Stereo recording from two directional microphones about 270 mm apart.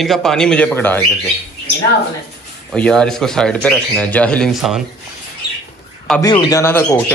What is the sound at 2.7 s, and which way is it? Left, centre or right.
Speech, centre.